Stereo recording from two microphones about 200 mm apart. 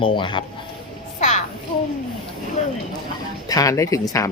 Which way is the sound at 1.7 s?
25° left (ahead or behind).